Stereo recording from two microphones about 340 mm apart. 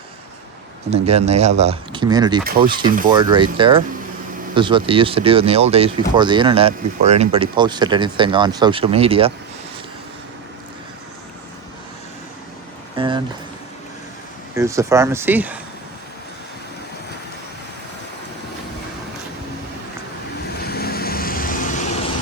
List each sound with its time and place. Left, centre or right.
0.9 s speech: centre
2.4 s speech: right
2.6 s speech: centre
13.0 s a sound: centre
14.5 s speech: centre
20.7 s vehicle: left